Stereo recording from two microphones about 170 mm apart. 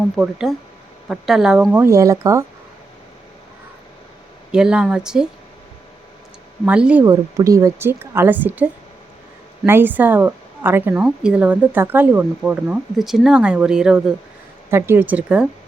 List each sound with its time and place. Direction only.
0.2 s speech: centre (ahead or behind)
1.8 s a woman's voice: 20° right (ahead or behind)
4.5 s speech: 5° right (ahead or behind)
6.7 s a woman's voice: 5° right (ahead or behind)
7.0 s a woman's voice: 20° right (ahead or behind)
14.7 s a woman's voice: 15° right (ahead or behind)